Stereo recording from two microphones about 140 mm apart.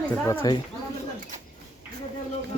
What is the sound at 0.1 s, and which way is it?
Speech, 15° left (ahead or behind).